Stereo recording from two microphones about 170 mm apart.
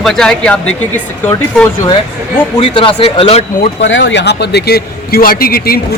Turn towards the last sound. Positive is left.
turn(degrees=60)  # may be behind; listen again after turning